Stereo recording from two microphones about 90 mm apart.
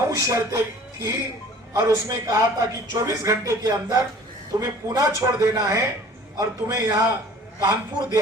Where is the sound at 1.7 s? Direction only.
40° right (ahead or behind).